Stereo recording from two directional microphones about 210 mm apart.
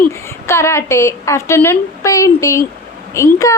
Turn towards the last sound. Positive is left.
turn(degrees=15)  # may be behind; listen again after turning